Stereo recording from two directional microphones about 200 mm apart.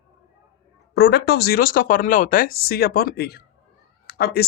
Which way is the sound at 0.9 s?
55° left (ahead or behind).